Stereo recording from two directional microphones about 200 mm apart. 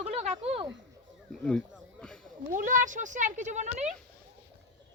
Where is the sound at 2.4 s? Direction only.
40° right (ahead or behind).